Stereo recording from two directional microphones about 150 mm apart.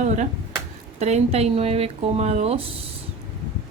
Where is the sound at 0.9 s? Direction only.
50° right (ahead or behind).